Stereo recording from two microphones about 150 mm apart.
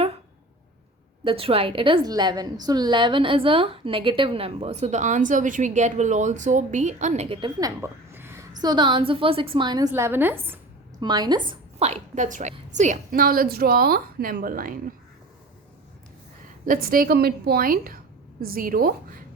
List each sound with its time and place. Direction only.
1.2 s a woman's voice: 40° right (ahead or behind)
7.3 s a woman's voice: 35° right (ahead or behind)
7.8 s a sound: 15° right (ahead or behind)
8.6 s a woman's voice: 30° right (ahead or behind); by 10.6 s 15° right (ahead or behind)
11.0 s a woman's voice: 30° right (ahead or behind)
11.8 s a woman's voice: 45° right (ahead or behind); by 14.9 s 70° right (ahead or behind)
16.6 s a woman's voice: 70° right (ahead or behind)